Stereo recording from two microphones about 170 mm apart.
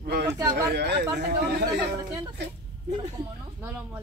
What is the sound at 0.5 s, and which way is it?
Speech, 75° right (ahead or behind).